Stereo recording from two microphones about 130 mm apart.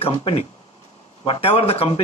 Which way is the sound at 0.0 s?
45° left (ahead or behind).